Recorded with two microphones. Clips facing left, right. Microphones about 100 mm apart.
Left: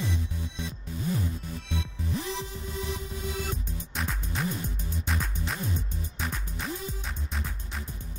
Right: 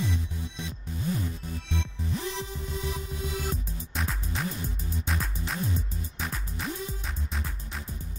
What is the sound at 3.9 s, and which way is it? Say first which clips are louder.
Music: right 1 dB; centre (ahead or behind).